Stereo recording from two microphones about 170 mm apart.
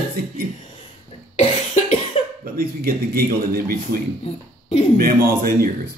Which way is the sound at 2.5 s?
60° right (ahead or behind).